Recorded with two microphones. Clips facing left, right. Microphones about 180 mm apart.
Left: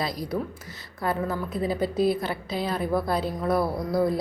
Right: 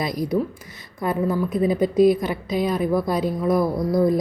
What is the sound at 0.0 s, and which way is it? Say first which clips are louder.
A woman's voice: right 6 dB; 15° right (ahead or behind).